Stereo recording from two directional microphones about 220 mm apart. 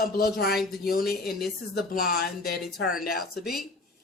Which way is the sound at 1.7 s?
40° left (ahead or behind).